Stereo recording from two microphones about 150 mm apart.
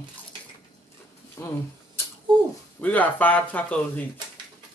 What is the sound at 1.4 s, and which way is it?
Speech, 20° left (ahead or behind).